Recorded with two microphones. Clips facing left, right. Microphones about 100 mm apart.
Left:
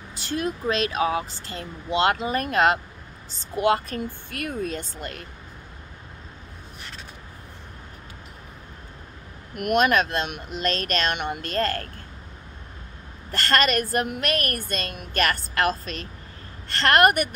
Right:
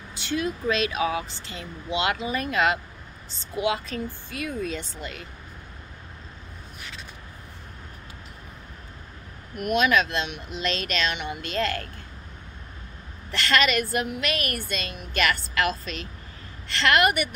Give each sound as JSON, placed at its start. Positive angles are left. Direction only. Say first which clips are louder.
{"t": 0.1, "sound": "a woman's voice", "louder": "even", "side_deg": 40}
{"t": 4.6, "sound": "a woman's voice", "louder": "left 1 dB", "side_deg": 45}
{"t": 9.6, "sound": "a woman's voice", "louder": "left 2 dB", "side_deg": 55}
{"t": 13.3, "sound": "a woman's voice", "louder": "left 1 dB", "side_deg": 45}